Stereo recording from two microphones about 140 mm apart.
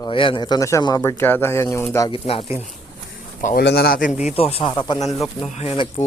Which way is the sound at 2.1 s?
40° left (ahead or behind).